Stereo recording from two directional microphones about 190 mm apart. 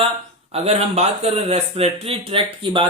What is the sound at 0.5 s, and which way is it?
Speech, 35° right (ahead or behind).